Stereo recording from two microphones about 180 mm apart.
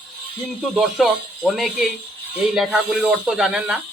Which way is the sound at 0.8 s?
Centre (ahead or behind).